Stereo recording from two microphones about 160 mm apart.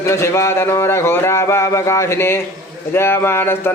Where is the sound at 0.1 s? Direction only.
15° left (ahead or behind).